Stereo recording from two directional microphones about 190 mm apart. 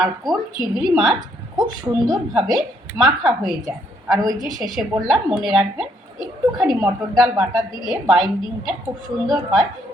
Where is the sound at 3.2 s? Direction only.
Centre (ahead or behind).